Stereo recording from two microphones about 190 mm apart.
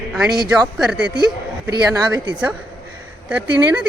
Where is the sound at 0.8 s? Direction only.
5° right (ahead or behind).